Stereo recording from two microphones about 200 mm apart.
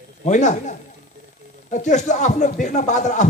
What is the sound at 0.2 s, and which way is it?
A man's voice, 35° left (ahead or behind).